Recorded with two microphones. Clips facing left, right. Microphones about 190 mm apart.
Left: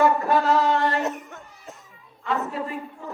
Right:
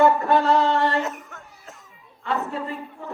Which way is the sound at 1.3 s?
20° left (ahead or behind).